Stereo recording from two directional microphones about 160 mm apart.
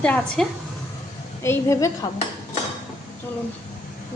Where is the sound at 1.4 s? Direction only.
15° left (ahead or behind).